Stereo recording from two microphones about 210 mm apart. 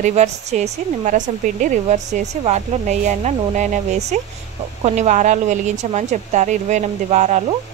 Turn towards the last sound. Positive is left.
turn(degrees=-35)  # may be behind; listen again after turning